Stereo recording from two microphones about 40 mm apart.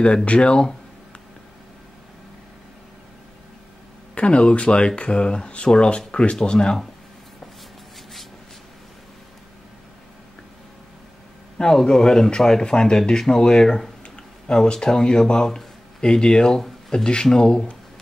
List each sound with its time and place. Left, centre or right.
0.0 s speech: left
4.1 s speech: left
11.5 s speech: centre